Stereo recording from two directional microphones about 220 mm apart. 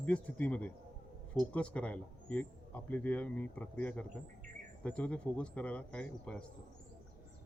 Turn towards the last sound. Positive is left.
turn(degrees=5)  # may be behind; listen again after turning